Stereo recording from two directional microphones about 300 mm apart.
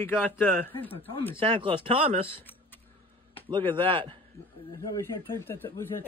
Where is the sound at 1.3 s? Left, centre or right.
Centre.